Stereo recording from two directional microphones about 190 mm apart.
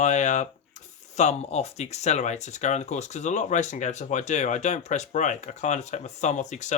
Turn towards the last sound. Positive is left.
turn(degrees=40)  # may be behind; listen again after turning